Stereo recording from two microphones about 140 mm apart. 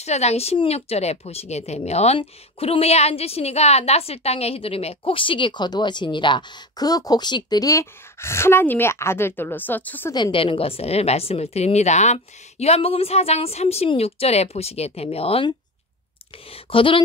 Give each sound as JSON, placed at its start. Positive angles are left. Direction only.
{"t": 0.0, "sound": "speech", "side_deg": 50}
{"t": 10.1, "sound": "a woman's voice", "side_deg": 35}
{"t": 16.7, "sound": "speech", "side_deg": 40}